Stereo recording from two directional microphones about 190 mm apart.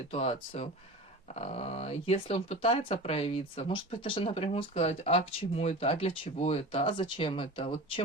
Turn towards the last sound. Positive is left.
turn(degrees=25)  # may be behind; listen again after turning